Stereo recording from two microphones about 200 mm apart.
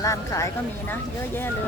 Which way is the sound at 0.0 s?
15° left (ahead or behind).